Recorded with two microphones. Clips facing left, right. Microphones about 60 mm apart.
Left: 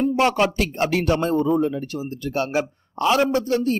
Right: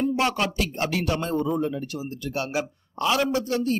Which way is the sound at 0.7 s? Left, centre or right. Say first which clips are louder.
Left 6 dB; left.